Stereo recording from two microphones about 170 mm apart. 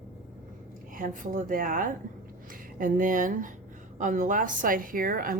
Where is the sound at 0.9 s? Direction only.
50° right (ahead or behind).